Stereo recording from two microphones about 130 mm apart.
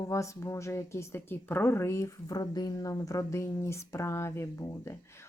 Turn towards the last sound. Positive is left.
turn(degrees=20)  # may be behind; listen again after turning